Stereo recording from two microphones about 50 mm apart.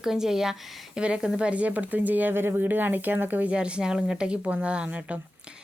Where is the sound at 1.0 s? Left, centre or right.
Centre; by 3.5 s right.